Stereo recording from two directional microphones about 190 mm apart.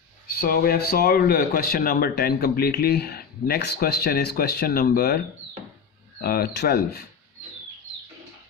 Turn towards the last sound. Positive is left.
turn(degrees=60)  # may be behind; listen again after turning